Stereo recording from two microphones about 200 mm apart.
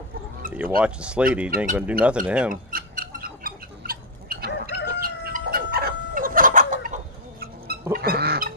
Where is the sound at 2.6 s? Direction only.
45° right (ahead or behind).